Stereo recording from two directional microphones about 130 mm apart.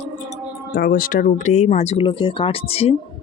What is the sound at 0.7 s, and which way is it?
Speech, 90° left.